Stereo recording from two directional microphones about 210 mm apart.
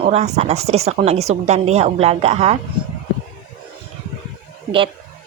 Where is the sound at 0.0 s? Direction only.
30° right (ahead or behind).